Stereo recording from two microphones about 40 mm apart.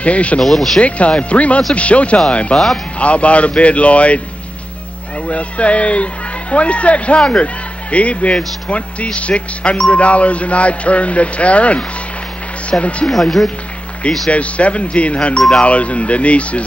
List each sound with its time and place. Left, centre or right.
0.0 s speech: left
0.4 s speech: centre
0.7 s speech: left
2.5 s speech: centre
3.0 s speech: left
5.3 s speech: left
13.1 s speech: centre
14.3 s speech: left